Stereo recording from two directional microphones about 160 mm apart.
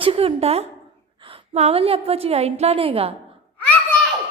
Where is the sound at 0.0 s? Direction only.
35° right (ahead or behind).